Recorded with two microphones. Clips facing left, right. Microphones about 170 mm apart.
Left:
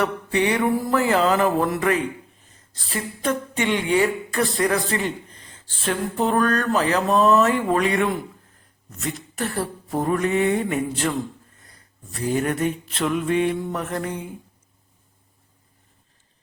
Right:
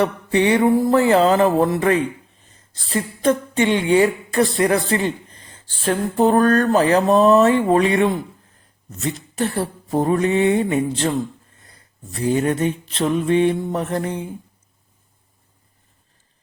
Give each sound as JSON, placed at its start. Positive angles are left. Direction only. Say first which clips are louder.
{"t": 0.0, "sound": "speech", "louder": "right 4 dB", "side_deg": -30}
{"t": 12.3, "sound": "speech", "louder": "right 3 dB", "side_deg": -25}